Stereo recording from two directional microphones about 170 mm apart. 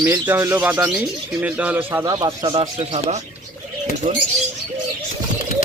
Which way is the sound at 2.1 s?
25° right (ahead or behind).